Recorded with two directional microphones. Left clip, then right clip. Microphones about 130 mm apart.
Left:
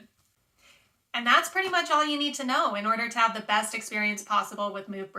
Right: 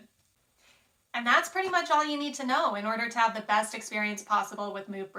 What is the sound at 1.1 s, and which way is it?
Speech, 20° left (ahead or behind).